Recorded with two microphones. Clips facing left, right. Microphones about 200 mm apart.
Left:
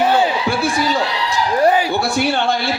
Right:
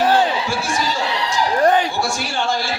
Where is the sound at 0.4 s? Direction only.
60° left (ahead or behind).